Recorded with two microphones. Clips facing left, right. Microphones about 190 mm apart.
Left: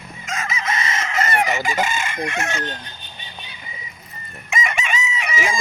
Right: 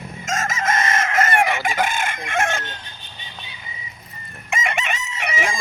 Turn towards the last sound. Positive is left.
turn(degrees=-60)  # may be behind; listen again after turning